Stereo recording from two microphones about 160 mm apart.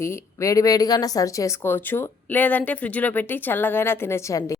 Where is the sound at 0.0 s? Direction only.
20° left (ahead or behind).